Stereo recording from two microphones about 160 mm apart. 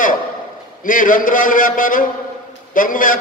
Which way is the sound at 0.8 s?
60° left (ahead or behind).